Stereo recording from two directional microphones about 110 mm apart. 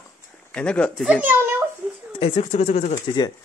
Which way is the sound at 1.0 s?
10° right (ahead or behind).